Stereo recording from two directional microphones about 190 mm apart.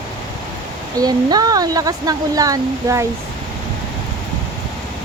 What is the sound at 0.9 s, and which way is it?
Speech, 20° right (ahead or behind).